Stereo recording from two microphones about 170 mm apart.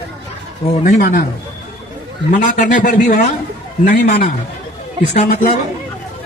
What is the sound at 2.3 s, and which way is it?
A man's voice, 50° left (ahead or behind).